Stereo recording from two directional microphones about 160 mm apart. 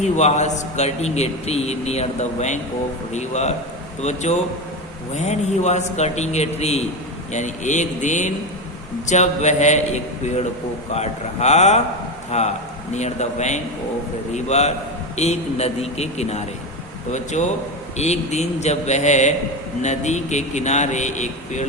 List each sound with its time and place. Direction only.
0.0 s a man's voice: 45° left (ahead or behind)